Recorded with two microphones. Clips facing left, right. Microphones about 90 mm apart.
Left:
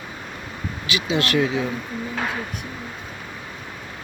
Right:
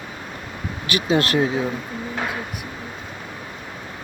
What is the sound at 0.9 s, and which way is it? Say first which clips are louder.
Speech: right 3 dB; 50° right (ahead or behind).